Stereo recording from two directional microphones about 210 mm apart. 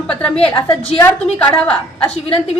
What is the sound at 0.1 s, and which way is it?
Speech, 5° left (ahead or behind).